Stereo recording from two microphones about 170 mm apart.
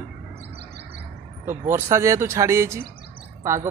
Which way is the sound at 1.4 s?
15° right (ahead or behind).